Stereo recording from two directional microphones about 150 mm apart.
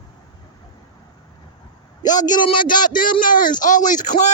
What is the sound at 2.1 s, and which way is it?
Speech, 25° left (ahead or behind).